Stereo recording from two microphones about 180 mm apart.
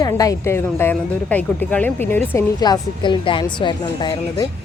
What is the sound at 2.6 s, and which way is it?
A woman's voice, 25° left (ahead or behind).